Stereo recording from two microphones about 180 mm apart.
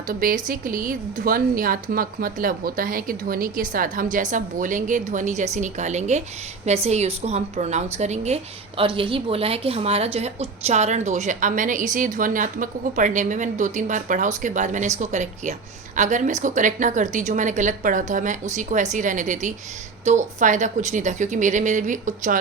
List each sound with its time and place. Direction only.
0.1 s a woman's voice: 50° right (ahead or behind)